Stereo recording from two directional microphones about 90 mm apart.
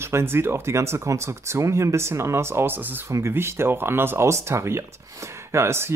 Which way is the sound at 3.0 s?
30° right (ahead or behind).